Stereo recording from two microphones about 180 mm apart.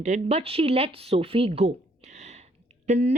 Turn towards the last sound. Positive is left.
turn(degrees=-40)  # may be behind; listen again after turning